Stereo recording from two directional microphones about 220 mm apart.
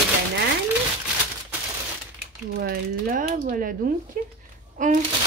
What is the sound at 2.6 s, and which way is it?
Speech, 40° right (ahead or behind).